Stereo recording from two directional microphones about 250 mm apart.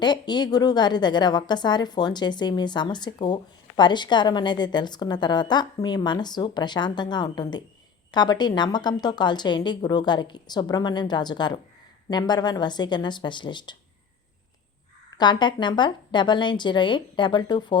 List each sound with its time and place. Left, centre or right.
0.0 s a woman's voice: centre
15.2 s a woman's voice: centre